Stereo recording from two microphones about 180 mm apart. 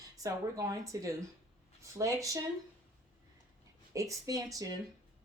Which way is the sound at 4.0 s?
20° right (ahead or behind).